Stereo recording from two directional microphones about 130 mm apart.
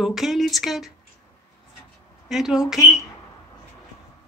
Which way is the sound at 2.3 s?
5° right (ahead or behind).